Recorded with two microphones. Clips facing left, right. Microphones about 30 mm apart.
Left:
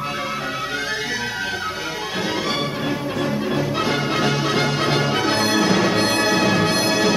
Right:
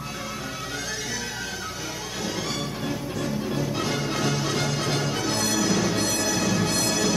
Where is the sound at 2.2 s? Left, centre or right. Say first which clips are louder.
Left 7 dB; left.